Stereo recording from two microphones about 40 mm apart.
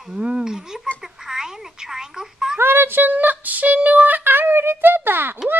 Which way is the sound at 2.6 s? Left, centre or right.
Right.